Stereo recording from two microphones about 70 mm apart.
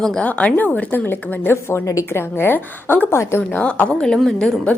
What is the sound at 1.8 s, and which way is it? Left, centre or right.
Speech, left.